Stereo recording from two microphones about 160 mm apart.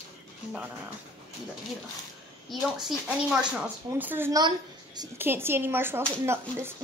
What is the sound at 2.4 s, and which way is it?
Speech, centre (ahead or behind).